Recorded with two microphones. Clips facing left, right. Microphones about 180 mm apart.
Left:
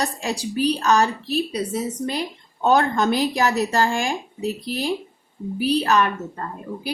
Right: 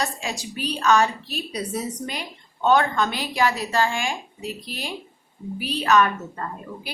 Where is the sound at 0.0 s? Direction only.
35° left (ahead or behind).